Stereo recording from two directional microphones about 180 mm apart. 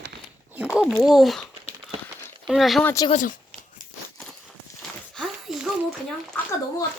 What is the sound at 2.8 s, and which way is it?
Speech, 20° left (ahead or behind).